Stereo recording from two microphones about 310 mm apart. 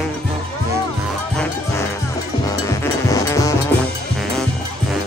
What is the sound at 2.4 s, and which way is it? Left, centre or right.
Music, centre.